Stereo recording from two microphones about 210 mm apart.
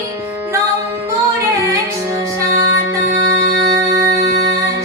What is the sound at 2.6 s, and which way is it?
Music, 65° left (ahead or behind).